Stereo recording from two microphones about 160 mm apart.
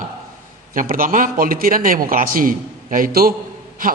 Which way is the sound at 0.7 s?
60° right (ahead or behind).